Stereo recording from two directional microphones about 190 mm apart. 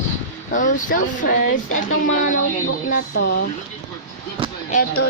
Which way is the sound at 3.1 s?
60° left (ahead or behind).